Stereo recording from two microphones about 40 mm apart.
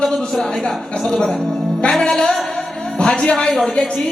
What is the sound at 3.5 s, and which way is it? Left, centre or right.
Speech, centre.